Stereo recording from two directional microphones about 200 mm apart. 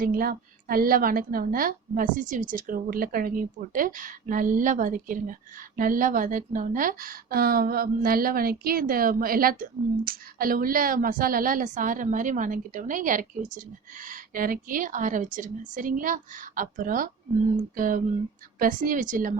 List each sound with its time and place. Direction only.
0.0 s a woman's voice: 45° right (ahead or behind)